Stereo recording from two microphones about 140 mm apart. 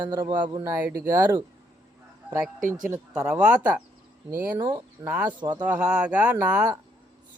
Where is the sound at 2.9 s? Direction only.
15° right (ahead or behind).